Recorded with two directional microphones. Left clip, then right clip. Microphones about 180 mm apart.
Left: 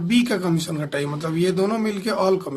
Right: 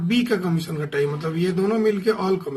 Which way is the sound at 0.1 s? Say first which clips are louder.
Left 1 dB; 40° left (ahead or behind).